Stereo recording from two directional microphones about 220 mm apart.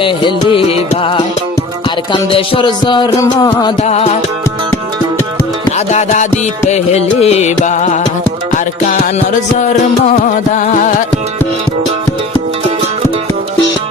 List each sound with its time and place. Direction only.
0.0 s music: 20° left (ahead or behind)
3.8 s music: 30° left (ahead or behind)
5.7 s music: 30° left (ahead or behind)